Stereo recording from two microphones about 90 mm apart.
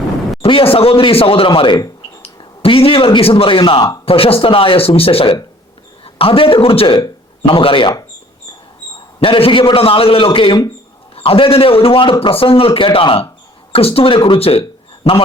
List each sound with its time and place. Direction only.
0.4 s speech: 85° left; by 1.8 s 65° left (ahead or behind)
2.2 s speech: 90° left; by 3.8 s 70° left (ahead or behind)
4.0 s a man's voice: 90° left; by 7.9 s 75° left (ahead or behind)
9.2 s a man's voice: 75° left (ahead or behind)
11.1 s speech: 90° left